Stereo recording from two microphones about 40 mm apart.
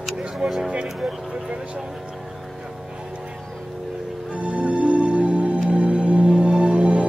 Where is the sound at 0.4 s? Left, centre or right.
Centre.